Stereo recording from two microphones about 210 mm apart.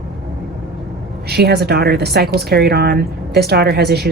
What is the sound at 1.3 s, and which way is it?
Speech, 50° right (ahead or behind).